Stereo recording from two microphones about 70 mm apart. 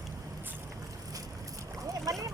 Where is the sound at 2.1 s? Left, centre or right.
Right.